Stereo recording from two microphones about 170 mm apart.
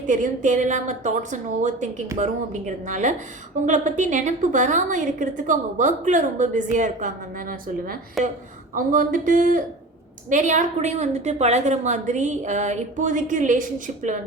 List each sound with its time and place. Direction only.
0.0 s a woman's voice: 50° right (ahead or behind)
8.2 s a woman's voice: centre (ahead or behind)
8.7 s a woman's voice: 50° right (ahead or behind)